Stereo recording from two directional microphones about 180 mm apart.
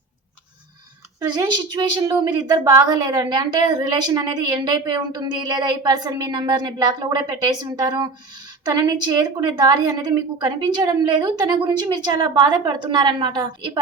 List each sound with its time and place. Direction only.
1.2 s a woman's voice: 20° right (ahead or behind)